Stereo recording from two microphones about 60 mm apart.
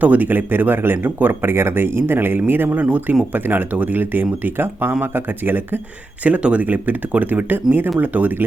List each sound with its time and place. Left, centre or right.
0.0 s speech: right
6.2 s speech: right